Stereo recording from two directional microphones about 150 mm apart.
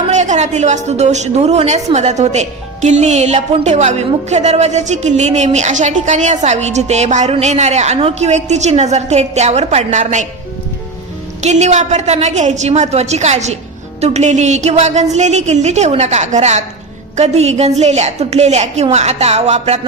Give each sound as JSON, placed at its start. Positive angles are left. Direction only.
{"t": 0.1, "sound": "a woman's voice", "side_deg": -50}
{"t": 11.3, "sound": "a woman's voice", "side_deg": -50}